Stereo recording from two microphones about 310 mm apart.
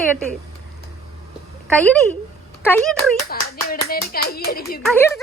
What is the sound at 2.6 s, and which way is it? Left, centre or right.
Speech, centre.